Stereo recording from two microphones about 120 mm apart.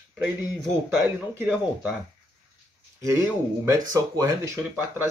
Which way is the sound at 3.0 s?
25° right (ahead or behind).